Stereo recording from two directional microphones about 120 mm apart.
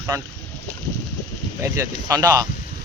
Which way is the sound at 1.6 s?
25° right (ahead or behind).